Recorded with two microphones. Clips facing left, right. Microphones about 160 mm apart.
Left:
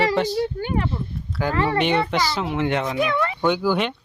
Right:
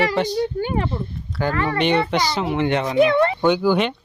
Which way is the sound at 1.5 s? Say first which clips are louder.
Left 4 dB; 30° left (ahead or behind).